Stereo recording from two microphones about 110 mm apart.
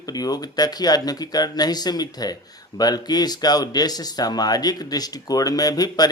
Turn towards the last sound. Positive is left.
turn(degrees=35)  # may be behind; listen again after turning